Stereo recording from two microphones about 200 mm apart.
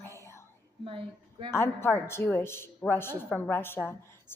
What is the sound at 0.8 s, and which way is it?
Speech, 25° right (ahead or behind).